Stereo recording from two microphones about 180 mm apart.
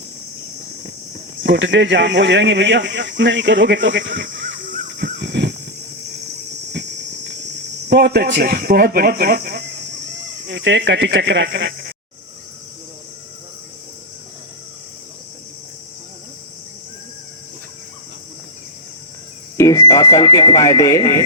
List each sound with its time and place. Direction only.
1.5 s speech: 90° right; by 5.5 s 70° right (ahead or behind)
7.9 s speech: 60° right (ahead or behind)
10.5 s speech: 90° right
19.5 s speech: 20° left (ahead or behind)